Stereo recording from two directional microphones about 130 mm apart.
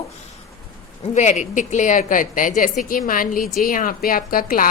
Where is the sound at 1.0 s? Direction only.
65° left (ahead or behind).